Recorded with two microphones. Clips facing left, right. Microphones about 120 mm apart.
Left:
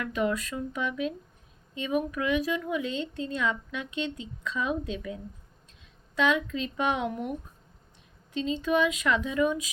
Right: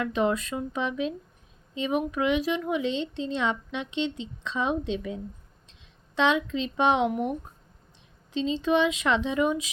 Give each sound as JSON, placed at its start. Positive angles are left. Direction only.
{"t": 0.0, "sound": "a woman's voice", "side_deg": -25}